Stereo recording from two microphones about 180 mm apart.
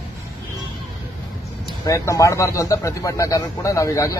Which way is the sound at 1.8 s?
15° left (ahead or behind).